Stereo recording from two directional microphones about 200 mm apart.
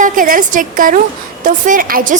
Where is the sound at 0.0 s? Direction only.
40° right (ahead or behind).